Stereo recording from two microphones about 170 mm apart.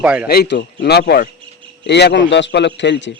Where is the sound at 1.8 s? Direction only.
80° left.